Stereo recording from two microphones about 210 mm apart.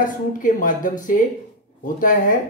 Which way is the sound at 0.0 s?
40° left (ahead or behind).